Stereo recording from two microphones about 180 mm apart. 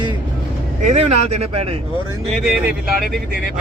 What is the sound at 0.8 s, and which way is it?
Speech, 35° right (ahead or behind).